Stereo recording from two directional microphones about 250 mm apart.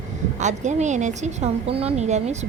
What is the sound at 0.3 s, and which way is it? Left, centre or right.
A woman's voice, right.